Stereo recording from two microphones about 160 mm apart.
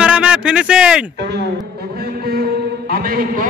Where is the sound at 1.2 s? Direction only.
90° right.